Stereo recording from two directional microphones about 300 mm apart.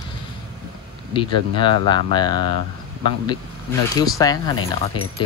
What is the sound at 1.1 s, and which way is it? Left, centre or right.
Speech, centre.